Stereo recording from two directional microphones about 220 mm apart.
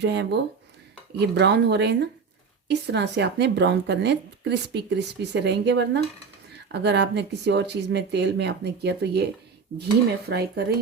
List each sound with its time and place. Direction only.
0.0 s speech: 50° right (ahead or behind)
10.2 s speech: 45° right (ahead or behind)